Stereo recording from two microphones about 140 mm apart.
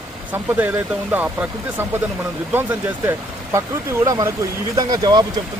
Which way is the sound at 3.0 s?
20° right (ahead or behind).